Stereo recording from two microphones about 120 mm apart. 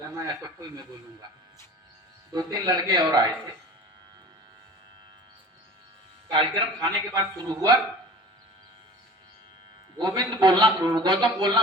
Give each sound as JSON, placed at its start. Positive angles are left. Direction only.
{"t": 2.3, "sound": "a man's voice", "side_deg": -35}
{"t": 6.3, "sound": "a man's voice", "side_deg": -40}
{"t": 10.0, "sound": "a man's voice", "side_deg": -40}